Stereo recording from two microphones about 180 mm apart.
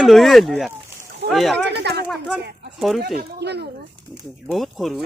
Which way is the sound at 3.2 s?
65° right (ahead or behind).